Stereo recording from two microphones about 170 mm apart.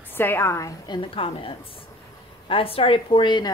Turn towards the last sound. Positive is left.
turn(degrees=30)  # may be behind; listen again after turning